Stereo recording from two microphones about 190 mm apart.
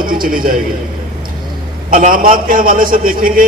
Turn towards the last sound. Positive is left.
turn(degrees=-50)  # may be behind; listen again after turning